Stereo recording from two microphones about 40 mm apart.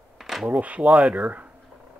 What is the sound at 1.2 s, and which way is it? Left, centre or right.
Speech, right.